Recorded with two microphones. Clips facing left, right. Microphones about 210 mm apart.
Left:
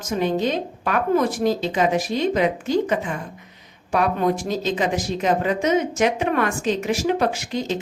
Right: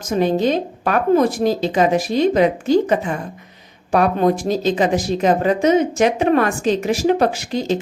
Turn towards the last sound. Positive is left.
turn(degrees=-35)  # may be behind; listen again after turning